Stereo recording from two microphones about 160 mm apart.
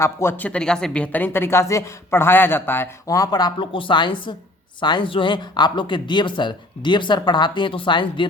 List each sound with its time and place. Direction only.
0.0 s speech: 15° left (ahead or behind)